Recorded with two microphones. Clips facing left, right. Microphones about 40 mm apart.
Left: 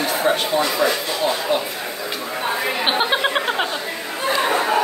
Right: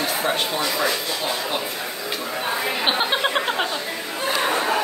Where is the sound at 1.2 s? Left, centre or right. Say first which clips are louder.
Left 5 dB; centre.